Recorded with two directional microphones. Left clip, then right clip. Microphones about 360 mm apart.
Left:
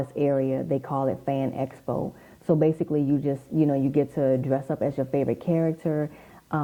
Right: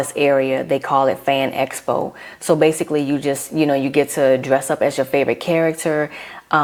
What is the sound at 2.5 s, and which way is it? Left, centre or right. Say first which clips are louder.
Speech: right 8 dB; centre.